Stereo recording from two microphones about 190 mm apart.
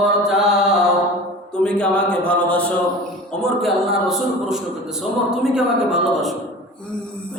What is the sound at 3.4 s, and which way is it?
A man's voice, centre (ahead or behind).